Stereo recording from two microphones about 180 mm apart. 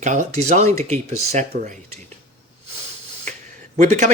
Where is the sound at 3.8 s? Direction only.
40° right (ahead or behind).